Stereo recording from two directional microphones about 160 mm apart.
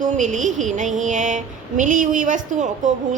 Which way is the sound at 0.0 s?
50° right (ahead or behind).